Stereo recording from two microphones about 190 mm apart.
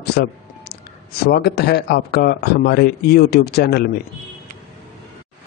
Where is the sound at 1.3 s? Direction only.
60° left (ahead or behind).